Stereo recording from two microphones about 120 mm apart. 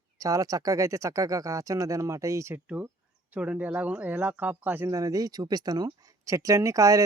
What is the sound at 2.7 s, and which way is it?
Speech, 15° right (ahead or behind).